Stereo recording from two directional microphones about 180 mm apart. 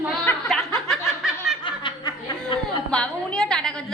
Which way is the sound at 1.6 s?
25° left (ahead or behind).